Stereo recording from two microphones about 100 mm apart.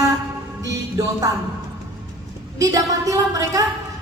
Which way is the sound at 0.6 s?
35° right (ahead or behind).